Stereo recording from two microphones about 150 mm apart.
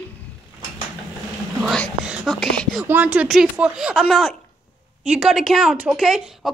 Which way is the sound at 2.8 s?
10° right (ahead or behind).